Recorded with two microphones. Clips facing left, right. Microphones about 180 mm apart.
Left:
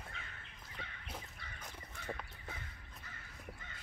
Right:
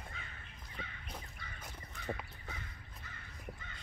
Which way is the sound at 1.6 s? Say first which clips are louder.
Right 3 dB; 10° right (ahead or behind).